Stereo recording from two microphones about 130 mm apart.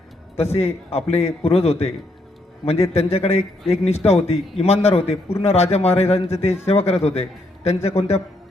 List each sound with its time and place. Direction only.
0.3 s a man's voice: 50° left (ahead or behind)